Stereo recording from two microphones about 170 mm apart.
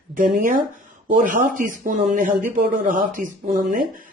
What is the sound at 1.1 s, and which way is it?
Speech, 50° right (ahead or behind).